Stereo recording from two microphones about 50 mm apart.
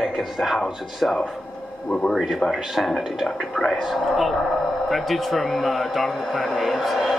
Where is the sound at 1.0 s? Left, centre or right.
Centre.